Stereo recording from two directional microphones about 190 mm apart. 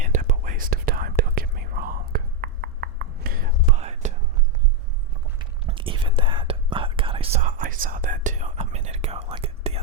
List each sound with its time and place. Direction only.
0.0 s whispering: 40° right (ahead or behind)
5.4 s whispering: 25° right (ahead or behind)